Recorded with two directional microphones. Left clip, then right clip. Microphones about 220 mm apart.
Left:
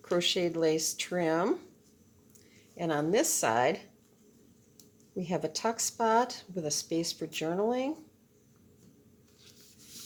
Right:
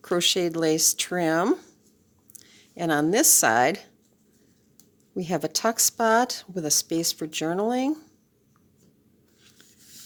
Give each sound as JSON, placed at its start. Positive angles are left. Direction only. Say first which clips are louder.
{"t": 0.0, "sound": "speech", "louder": "right 6 dB", "side_deg": -45}
{"t": 5.1, "sound": "speech", "louder": "right 6 dB", "side_deg": -50}